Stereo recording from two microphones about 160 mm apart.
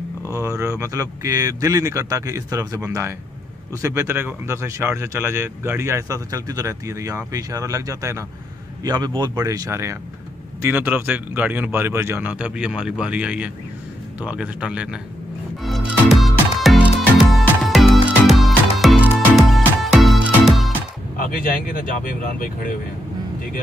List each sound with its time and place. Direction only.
0.3 s speech: 20° right (ahead or behind)
16.1 s music: centre (ahead or behind)
21.2 s speech: 60° left (ahead or behind)